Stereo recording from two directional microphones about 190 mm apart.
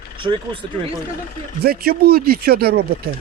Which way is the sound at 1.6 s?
55° right (ahead or behind).